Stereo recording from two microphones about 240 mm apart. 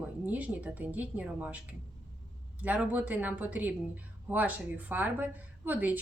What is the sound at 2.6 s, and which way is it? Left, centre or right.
Speech, centre.